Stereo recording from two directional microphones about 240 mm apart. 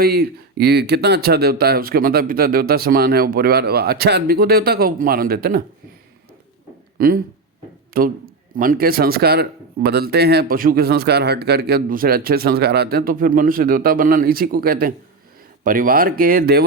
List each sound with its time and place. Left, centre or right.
0.0 s speech: right
7.9 s speech: right